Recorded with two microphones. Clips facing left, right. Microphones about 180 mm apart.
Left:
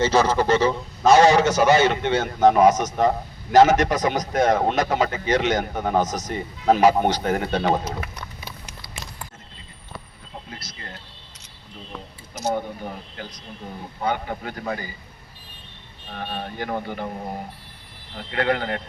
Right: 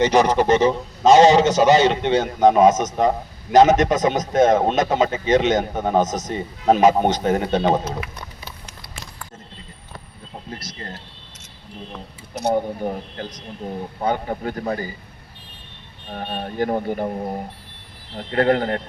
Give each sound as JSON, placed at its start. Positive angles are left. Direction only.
{"t": 0.0, "sound": "a man's voice", "side_deg": -15}
{"t": 10.5, "sound": "speech", "side_deg": -40}
{"t": 12.3, "sound": "speech", "side_deg": -60}
{"t": 12.8, "sound": "a man's voice", "side_deg": -40}
{"t": 16.1, "sound": "speech", "side_deg": -40}
{"t": 18.2, "sound": "speech", "side_deg": -40}